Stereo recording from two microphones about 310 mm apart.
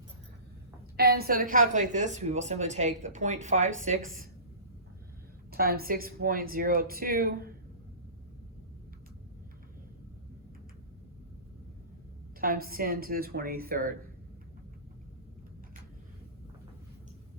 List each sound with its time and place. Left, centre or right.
0.9 s a woman's voice: right
5.5 s a woman's voice: right
12.4 s a woman's voice: right